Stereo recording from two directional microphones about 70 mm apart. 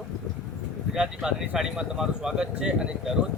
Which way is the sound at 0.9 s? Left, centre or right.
Centre.